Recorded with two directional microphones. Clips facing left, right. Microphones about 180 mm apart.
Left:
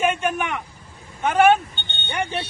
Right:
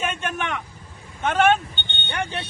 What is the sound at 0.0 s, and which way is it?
Vehicle, 10° left (ahead or behind).